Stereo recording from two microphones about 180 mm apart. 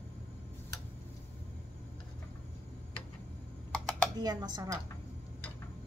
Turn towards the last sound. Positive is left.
turn(degrees=-20)  # may be behind; listen again after turning